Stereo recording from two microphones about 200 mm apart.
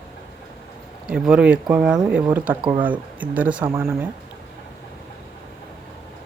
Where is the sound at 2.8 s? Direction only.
10° right (ahead or behind).